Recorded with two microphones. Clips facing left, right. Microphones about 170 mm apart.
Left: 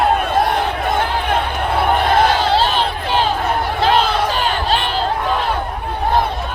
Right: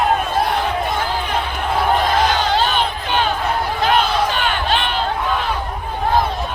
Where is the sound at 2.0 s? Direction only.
55° left (ahead or behind).